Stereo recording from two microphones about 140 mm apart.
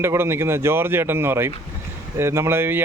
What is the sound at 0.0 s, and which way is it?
Speech, 15° right (ahead or behind).